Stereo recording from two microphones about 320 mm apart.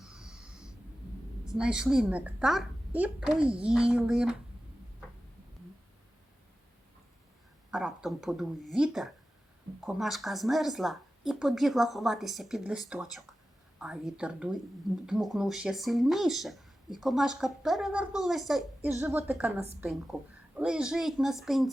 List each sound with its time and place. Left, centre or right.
0.0 s a sound: centre
1.5 s speech: centre
7.7 s speech: centre